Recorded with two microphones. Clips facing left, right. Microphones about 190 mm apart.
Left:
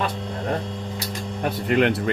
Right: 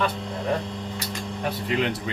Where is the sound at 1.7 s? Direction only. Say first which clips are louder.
Left 6 dB; 60° left (ahead or behind).